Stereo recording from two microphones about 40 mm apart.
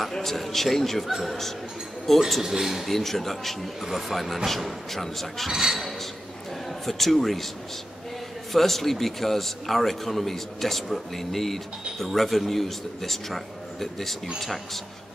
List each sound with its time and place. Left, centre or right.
0.2 s a man's voice: centre
2.4 s speech: centre
2.9 s a man's voice: centre
5.5 s speech: centre
6.9 s a man's voice: centre
8.5 s a man's voice: centre